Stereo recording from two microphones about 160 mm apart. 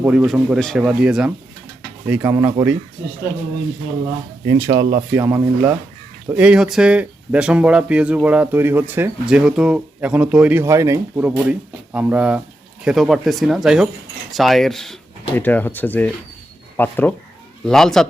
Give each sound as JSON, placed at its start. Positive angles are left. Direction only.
{"t": 0.0, "sound": "speech", "side_deg": -10}
{"t": 4.4, "sound": "speech", "side_deg": -20}